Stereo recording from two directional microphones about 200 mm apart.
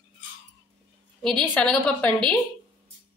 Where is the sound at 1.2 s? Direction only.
5° left (ahead or behind).